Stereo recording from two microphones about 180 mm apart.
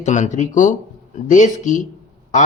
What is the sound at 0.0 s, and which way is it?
Speech, 45° left (ahead or behind).